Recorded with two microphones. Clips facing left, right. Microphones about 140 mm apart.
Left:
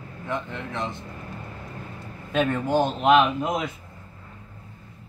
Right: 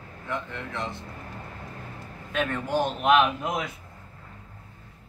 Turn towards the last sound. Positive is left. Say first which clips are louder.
# left 3 dB
turn(degrees=20)  # may be behind; listen again after turning